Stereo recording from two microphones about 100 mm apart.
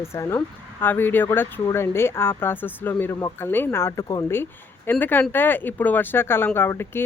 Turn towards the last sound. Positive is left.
turn(degrees=25)  # may be behind; listen again after turning